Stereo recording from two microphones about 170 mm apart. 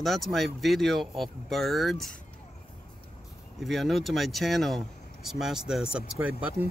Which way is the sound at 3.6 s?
Centre (ahead or behind).